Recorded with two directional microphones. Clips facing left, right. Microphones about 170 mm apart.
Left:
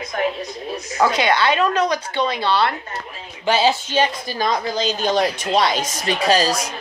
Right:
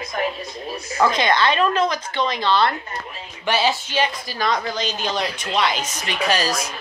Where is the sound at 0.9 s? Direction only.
10° left (ahead or behind).